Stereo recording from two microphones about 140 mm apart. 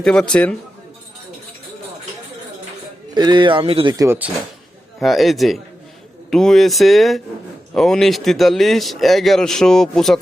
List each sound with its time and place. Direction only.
0.0 s a man's voice: 5° left (ahead or behind)
3.2 s speech: 30° right (ahead or behind)
3.9 s speech: 20° right (ahead or behind)
4.9 s a man's voice: centre (ahead or behind)